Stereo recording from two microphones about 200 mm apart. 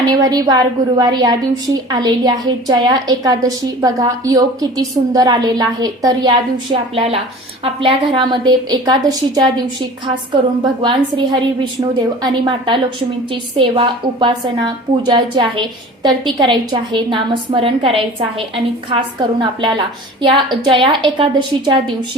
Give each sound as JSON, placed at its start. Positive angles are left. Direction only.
{"t": 0.0, "sound": "a woman's voice", "side_deg": -20}